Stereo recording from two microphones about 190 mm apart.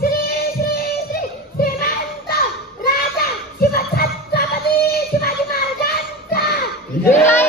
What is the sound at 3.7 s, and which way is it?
Music, 50° left (ahead or behind).